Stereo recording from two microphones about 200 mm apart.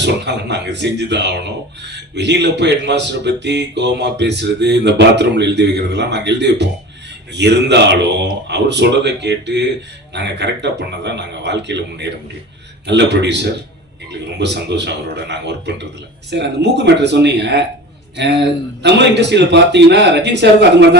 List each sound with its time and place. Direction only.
0.0 s speech: 60° right (ahead or behind)